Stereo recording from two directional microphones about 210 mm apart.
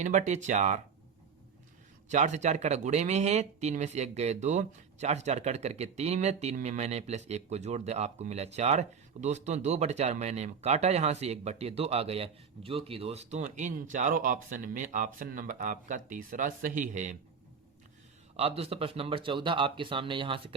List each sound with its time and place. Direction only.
0.0 s speech: 35° right (ahead or behind)
2.0 s speech: 35° right (ahead or behind)
18.3 s speech: 30° right (ahead or behind)